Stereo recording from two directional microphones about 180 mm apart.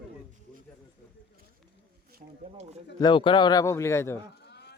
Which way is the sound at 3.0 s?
25° left (ahead or behind).